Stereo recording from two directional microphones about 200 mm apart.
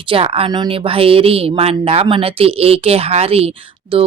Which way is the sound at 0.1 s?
30° right (ahead or behind).